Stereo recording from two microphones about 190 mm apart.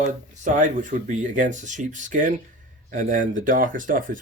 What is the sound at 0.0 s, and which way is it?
Speech, 40° right (ahead or behind).